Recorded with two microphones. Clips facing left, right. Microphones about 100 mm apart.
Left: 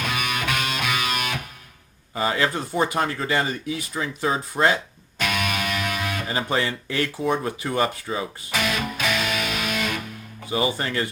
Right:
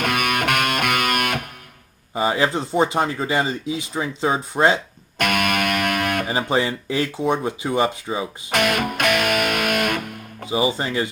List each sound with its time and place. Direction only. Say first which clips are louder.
0.0 s music: right 5 dB; 60° right (ahead or behind)
2.1 s speech: right 3 dB; 20° right (ahead or behind)
5.1 s music: right 5 dB; 60° right (ahead or behind)
6.2 s speech: right 3 dB; 20° right (ahead or behind)
8.4 s music: right 7 dB; 60° right (ahead or behind)
10.4 s speech: right 3 dB; 20° right (ahead or behind)